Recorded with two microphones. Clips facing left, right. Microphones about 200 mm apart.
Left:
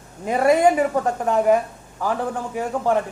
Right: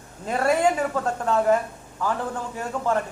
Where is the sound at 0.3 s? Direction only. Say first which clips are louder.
Left 5 dB; 15° left (ahead or behind).